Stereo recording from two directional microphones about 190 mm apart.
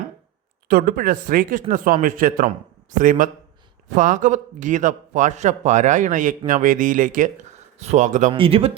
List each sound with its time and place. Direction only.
0.7 s a man's voice: 50° right (ahead or behind)
8.3 s speech: 30° right (ahead or behind)